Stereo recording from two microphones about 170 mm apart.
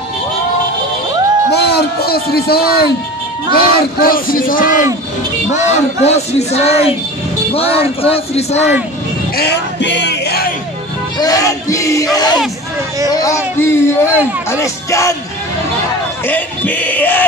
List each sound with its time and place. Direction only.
1.5 s music: 70° left (ahead or behind)
3.5 s speech: 60° left (ahead or behind)
5.5 s speech: 40° left (ahead or behind)
9.4 s music: 85° left
11.1 s a sound: 20° left (ahead or behind)
13.1 s speech: 20° left (ahead or behind)
16.3 s male singing: 10° left (ahead or behind)